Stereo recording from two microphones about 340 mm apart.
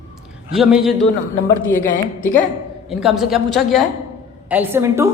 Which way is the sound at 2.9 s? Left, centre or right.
Centre.